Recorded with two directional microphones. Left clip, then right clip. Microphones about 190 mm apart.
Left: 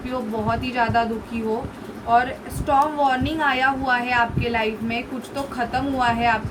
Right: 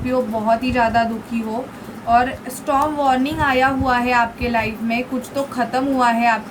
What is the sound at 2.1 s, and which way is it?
A woman's voice, 25° right (ahead or behind).